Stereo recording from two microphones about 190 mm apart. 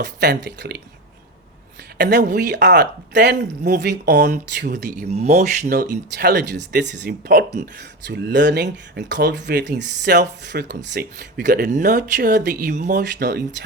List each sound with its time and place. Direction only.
0.2 s speech: 65° right (ahead or behind)
2.0 s speech: 60° right (ahead or behind)
4.9 s speech: 35° right (ahead or behind)
5.8 s speech: 55° right (ahead or behind)
11.7 s speech: 40° right (ahead or behind)
11.9 s speech: 60° right (ahead or behind)
12.5 s speech: 45° right (ahead or behind)
13.0 s speech: 60° right (ahead or behind)